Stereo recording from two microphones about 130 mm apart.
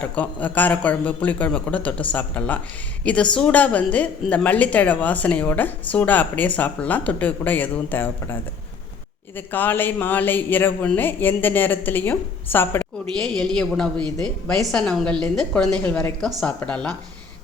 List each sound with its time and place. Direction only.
0.0 s a woman's voice: 10° left (ahead or behind)
13.1 s a woman's voice: 5° left (ahead or behind)